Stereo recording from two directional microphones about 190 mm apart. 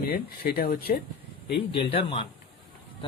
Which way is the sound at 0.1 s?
55° left (ahead or behind).